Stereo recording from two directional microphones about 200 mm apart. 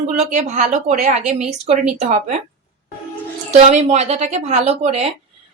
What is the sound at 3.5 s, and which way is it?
A woman's voice, 35° right (ahead or behind).